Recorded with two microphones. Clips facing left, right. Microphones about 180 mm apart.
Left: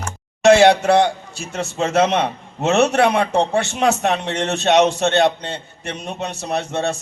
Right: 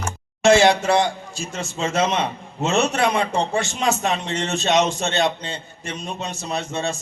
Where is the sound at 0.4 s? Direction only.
60° left (ahead or behind).